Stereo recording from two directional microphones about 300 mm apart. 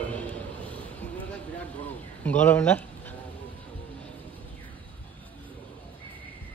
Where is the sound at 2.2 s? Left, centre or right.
Centre.